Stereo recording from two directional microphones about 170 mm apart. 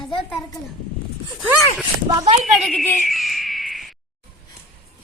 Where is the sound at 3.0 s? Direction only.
Centre (ahead or behind).